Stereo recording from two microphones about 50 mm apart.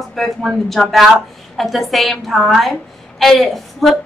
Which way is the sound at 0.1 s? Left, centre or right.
Centre.